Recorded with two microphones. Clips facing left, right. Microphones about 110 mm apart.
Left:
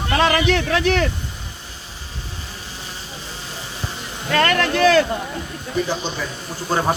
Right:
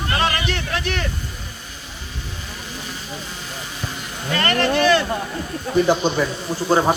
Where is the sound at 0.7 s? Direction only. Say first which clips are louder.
Left 6 dB; 90° left.